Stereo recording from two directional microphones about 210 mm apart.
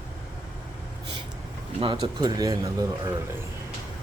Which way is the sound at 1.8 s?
20° right (ahead or behind).